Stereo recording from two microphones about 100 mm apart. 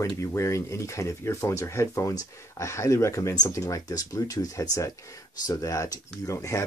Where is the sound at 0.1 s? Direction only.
30° left (ahead or behind).